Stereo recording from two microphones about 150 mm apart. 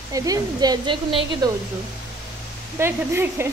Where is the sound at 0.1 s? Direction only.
25° right (ahead or behind).